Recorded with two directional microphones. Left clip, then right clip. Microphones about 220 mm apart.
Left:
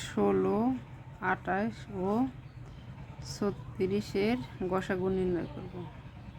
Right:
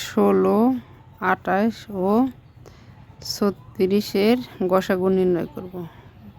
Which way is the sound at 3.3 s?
50° right (ahead or behind).